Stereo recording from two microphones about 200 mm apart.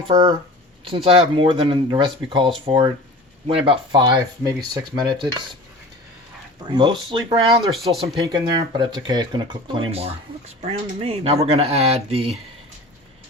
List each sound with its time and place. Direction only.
0.1 s speech: 20° right (ahead or behind)
6.7 s speech: 25° right (ahead or behind)
7.8 s speech: centre (ahead or behind)
8.0 s speech: 15° right (ahead or behind)